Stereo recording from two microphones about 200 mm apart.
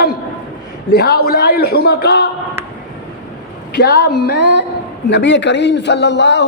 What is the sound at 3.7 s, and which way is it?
A man's voice, 55° left (ahead or behind).